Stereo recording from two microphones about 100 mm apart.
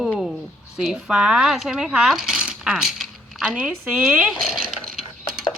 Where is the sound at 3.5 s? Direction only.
15° right (ahead or behind).